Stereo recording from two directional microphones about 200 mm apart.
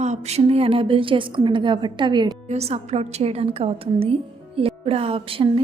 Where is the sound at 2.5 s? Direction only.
30° right (ahead or behind).